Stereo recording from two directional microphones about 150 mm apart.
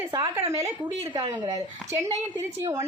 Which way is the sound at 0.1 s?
20° right (ahead or behind).